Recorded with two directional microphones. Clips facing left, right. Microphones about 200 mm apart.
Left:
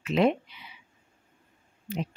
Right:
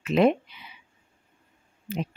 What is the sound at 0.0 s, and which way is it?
Speech, 50° right (ahead or behind).